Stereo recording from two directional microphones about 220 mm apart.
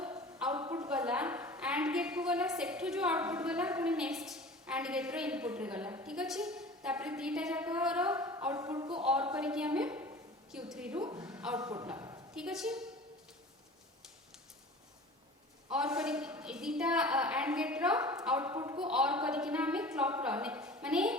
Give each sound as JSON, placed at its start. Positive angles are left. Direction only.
{"t": 0.3, "sound": "a sound", "side_deg": -5}
{"t": 0.7, "sound": "a woman's voice", "side_deg": -5}
{"t": 11.0, "sound": "a woman's voice", "side_deg": -20}
{"t": 11.3, "sound": "a woman's voice", "side_deg": -5}
{"t": 11.8, "sound": "a sound", "side_deg": -15}
{"t": 12.3, "sound": "a woman's voice", "side_deg": -5}
{"t": 15.7, "sound": "a woman's voice", "side_deg": -5}